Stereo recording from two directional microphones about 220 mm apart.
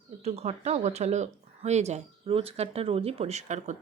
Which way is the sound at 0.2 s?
30° right (ahead or behind).